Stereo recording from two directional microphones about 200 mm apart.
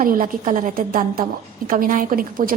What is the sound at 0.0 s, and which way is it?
A woman's voice, 45° right (ahead or behind).